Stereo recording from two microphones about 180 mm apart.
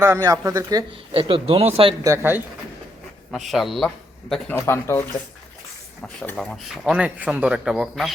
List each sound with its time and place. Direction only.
0.0 s speech: 20° right (ahead or behind)
2.0 s speech: 15° right (ahead or behind)
3.3 s speech: centre (ahead or behind)
4.5 s speech: 15° left (ahead or behind)
6.0 s speech: 5° left (ahead or behind)